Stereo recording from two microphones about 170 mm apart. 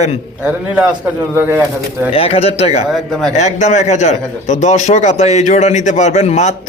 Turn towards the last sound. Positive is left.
turn(degrees=40)  # may be behind; listen again after turning